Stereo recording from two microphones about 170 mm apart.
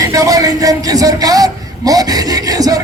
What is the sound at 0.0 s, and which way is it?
A man's voice, 20° right (ahead or behind).